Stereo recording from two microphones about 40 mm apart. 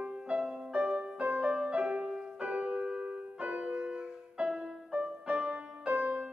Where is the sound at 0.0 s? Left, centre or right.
Right.